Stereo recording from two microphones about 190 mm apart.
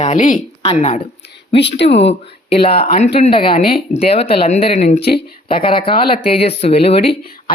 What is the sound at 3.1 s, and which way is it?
A woman's voice, 30° left (ahead or behind).